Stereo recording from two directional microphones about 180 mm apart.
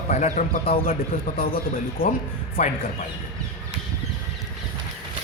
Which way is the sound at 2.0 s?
30° left (ahead or behind).